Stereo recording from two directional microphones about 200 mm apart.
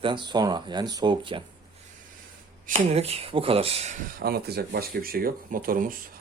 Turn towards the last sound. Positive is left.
turn(degrees=-45)  # may be behind; listen again after turning